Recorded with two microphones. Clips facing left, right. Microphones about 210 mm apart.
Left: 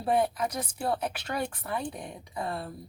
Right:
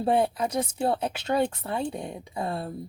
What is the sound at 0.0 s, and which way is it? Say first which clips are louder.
Speech: right 3 dB; 30° right (ahead or behind).